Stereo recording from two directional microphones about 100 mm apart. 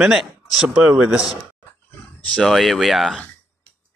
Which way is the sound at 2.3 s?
Centre (ahead or behind).